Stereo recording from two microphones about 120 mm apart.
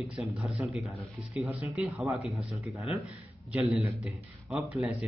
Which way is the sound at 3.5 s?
5° right (ahead or behind).